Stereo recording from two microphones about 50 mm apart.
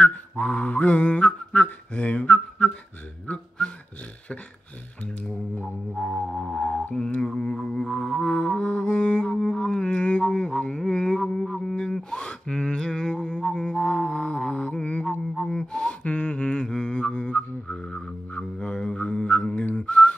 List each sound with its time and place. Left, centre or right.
0.0 s mantra: left
3.3 s speech: left
5.9 s music: centre
7.2 s didgeridoo: centre
7.7 s music: centre
9.3 s a sound: centre
10.8 s music: centre
11.7 s a sound: centre
12.8 s humming: centre
13.4 s mantra: centre
15.3 s gasp: centre
15.7 s a sound: left
17.6 s music: centre